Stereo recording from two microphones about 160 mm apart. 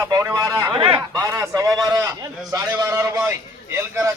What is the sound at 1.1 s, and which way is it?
A man's voice, 20° right (ahead or behind).